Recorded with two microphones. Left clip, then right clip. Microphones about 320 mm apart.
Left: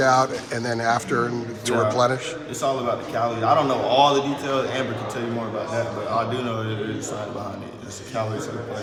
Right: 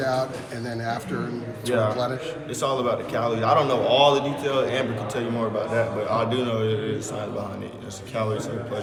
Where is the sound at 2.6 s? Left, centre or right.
Centre.